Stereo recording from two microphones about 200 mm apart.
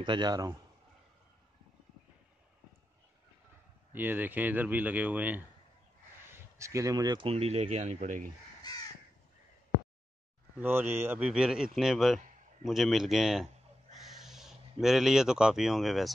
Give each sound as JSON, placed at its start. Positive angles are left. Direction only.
{"t": 0.0, "sound": "speech", "side_deg": -20}
{"t": 3.9, "sound": "speech", "side_deg": -10}
{"t": 10.6, "sound": "a man's voice", "side_deg": -10}